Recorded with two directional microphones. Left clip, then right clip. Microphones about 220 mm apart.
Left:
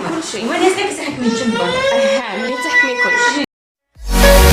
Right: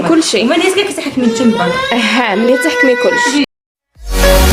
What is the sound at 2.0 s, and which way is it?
Speech, 40° right (ahead or behind).